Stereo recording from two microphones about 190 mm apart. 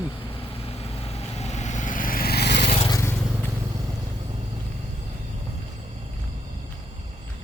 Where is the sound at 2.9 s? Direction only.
15° left (ahead or behind).